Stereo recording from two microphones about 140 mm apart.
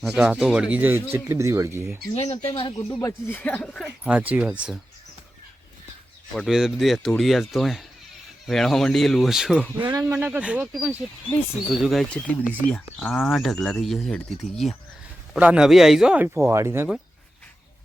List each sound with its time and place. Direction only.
0.0 s speech: 5° right (ahead or behind)
2.1 s speech: 50° left (ahead or behind)
3.0 s speech: 15° left (ahead or behind)
3.8 s speech: 10° right (ahead or behind)
6.3 s speech: centre (ahead or behind)
15.4 s speech: 10° right (ahead or behind)